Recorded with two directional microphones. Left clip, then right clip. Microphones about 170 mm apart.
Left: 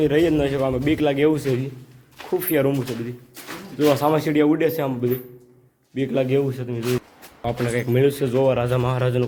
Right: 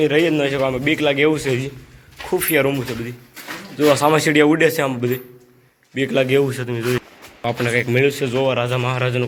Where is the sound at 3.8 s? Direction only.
5° left (ahead or behind).